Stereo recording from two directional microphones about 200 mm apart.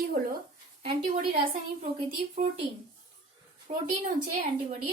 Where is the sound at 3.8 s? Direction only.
40° right (ahead or behind).